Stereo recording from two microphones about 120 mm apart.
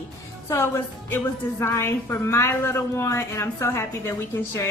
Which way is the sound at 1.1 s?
20° left (ahead or behind).